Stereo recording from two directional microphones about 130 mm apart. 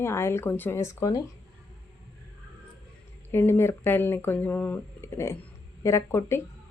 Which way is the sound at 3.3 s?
20° left (ahead or behind).